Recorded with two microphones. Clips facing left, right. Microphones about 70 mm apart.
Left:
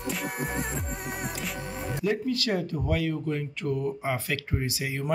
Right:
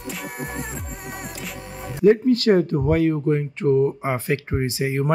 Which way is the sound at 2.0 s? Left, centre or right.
Right.